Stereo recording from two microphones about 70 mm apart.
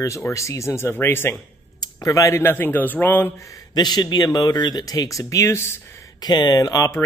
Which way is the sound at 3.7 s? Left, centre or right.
Left.